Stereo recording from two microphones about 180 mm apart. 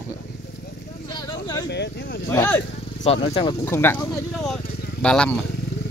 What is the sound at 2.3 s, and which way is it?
Speech, 15° left (ahead or behind).